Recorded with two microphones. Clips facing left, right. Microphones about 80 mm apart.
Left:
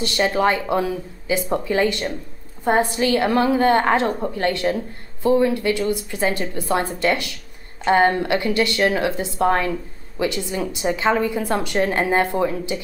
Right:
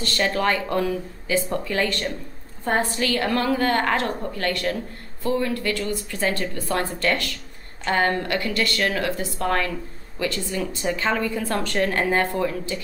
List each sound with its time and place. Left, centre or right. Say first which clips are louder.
0.0 s a woman's voice: left 4 dB; centre